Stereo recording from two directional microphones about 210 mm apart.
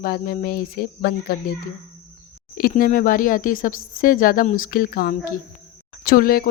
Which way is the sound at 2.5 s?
45° left (ahead or behind).